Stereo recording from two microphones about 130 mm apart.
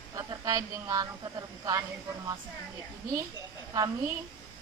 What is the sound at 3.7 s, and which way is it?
Speech, 30° right (ahead or behind).